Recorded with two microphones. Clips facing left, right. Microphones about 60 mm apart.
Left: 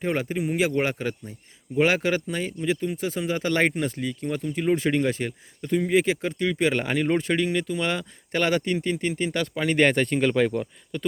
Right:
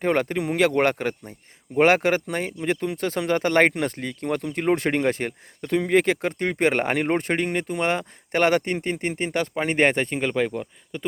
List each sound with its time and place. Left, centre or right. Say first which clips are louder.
0.0 s speech: right 3 dB; right; by 11.1 s centre